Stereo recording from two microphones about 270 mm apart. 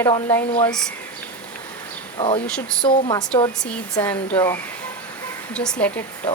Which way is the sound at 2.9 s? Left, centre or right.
Left.